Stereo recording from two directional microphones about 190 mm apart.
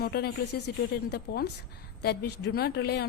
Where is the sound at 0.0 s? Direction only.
55° left (ahead or behind).